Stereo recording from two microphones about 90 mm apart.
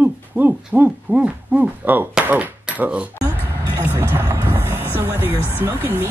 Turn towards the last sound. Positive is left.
turn(degrees=-25)  # may be behind; listen again after turning